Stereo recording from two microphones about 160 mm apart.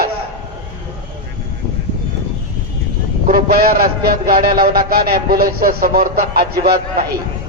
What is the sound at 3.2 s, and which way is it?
A man's voice, 65° right (ahead or behind).